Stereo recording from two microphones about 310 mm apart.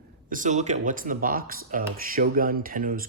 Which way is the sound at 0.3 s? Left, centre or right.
Right.